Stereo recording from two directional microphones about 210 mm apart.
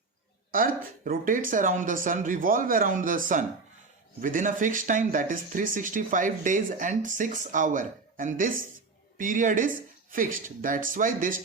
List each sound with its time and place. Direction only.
1.0 s speech: 40° right (ahead or behind)